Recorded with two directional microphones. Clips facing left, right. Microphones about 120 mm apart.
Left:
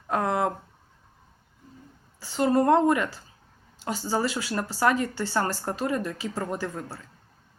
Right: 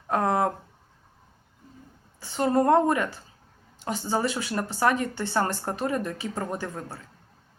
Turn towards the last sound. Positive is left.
turn(degrees=-25)  # may be behind; listen again after turning